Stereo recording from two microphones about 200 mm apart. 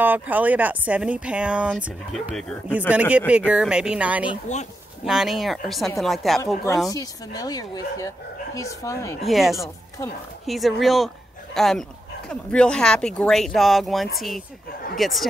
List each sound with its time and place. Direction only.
0.0 s speech: 10° right (ahead or behind)
6.9 s speech: 20° left (ahead or behind)
9.3 s speech: centre (ahead or behind)